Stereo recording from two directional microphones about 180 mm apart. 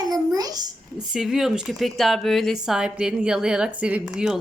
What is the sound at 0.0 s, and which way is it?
Babbling, 20° right (ahead or behind).